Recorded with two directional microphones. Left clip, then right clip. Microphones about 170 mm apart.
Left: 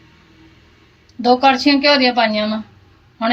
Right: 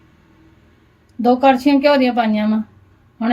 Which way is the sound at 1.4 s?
55° right (ahead or behind).